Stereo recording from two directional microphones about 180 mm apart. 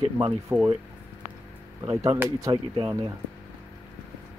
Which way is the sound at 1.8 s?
20° right (ahead or behind).